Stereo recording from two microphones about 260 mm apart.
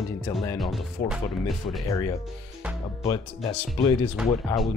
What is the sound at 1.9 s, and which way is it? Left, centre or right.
Speech, centre.